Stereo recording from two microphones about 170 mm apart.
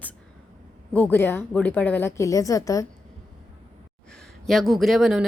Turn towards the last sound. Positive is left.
turn(degrees=0)  # may be behind; listen again after turning